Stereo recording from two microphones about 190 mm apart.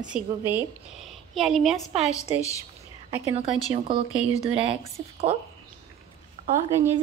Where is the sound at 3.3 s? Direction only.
30° right (ahead or behind).